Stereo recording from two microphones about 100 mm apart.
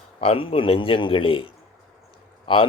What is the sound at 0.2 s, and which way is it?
A man's voice, 65° left (ahead or behind).